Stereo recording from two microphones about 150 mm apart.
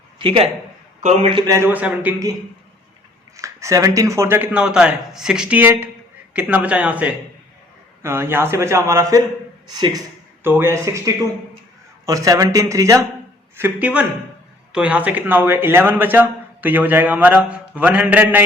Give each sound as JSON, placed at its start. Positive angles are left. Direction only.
{"t": 0.2, "sound": "a man's voice", "side_deg": -40}
{"t": 1.5, "sound": "a man's voice", "side_deg": -20}
{"t": 3.3, "sound": "a man's voice", "side_deg": -20}
{"t": 10.4, "sound": "a man's voice", "side_deg": -15}